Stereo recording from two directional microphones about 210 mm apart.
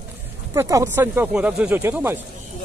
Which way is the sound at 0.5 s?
15° right (ahead or behind).